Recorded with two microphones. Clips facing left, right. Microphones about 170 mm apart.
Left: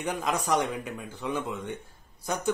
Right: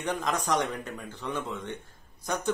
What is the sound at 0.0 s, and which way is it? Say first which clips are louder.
A man's voice: even; 10° left (ahead or behind).